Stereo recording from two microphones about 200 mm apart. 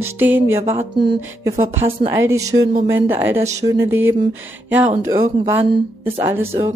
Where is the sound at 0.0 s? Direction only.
10° right (ahead or behind).